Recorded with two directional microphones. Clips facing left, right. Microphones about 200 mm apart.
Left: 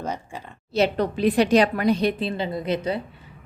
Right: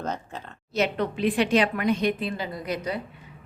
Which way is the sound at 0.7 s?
35° left (ahead or behind).